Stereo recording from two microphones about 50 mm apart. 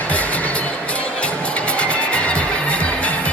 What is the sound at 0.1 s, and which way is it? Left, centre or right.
Music, left.